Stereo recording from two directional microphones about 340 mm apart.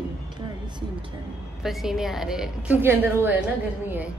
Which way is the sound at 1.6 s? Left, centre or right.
Centre.